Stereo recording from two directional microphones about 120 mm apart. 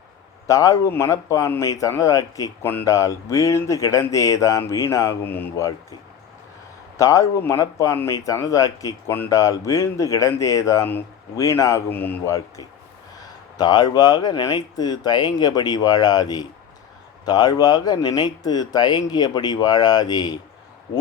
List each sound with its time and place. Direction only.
0.4 s speech: 30° left (ahead or behind)
6.9 s speech: 30° left (ahead or behind)